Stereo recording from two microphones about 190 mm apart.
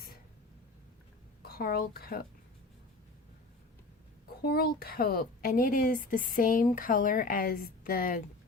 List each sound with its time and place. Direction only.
1.4 s a woman's voice: 50° left (ahead or behind)
4.4 s speech: 55° left (ahead or behind)